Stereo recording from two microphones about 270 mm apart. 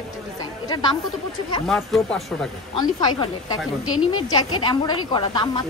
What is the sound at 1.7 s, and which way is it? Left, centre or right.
Speech, centre.